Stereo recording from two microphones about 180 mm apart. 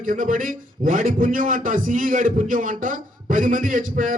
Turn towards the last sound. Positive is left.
turn(degrees=-45)  # may be behind; listen again after turning